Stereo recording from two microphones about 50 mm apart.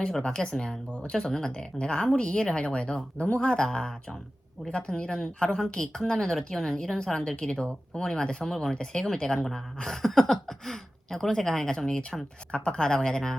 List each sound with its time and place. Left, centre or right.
0.2 s a woman's voice: centre
12.5 s a woman's voice: left